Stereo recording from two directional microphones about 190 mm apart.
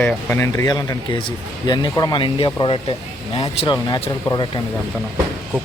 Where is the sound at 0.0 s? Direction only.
10° left (ahead or behind).